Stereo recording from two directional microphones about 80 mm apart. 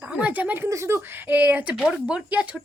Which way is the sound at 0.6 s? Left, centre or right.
Right.